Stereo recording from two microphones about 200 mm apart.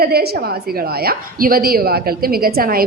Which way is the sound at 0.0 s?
50° right (ahead or behind).